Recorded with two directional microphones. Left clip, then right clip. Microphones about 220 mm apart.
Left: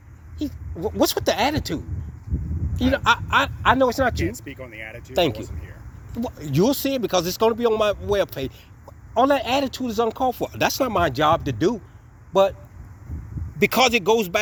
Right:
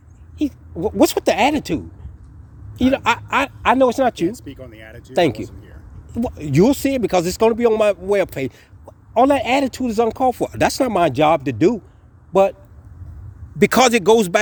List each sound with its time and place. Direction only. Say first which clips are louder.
0.4 s speech: right 6 dB; 55° right (ahead or behind)
2.8 s speech: right 2 dB; 50° right (ahead or behind)
13.6 s speech: right 4 dB; 50° right (ahead or behind)